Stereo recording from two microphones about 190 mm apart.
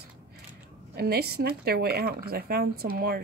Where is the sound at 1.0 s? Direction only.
55° right (ahead or behind).